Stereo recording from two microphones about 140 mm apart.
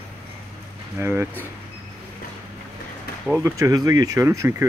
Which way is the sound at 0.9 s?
20° right (ahead or behind).